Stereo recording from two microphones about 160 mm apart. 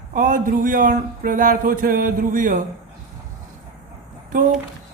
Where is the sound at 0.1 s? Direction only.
60° right (ahead or behind).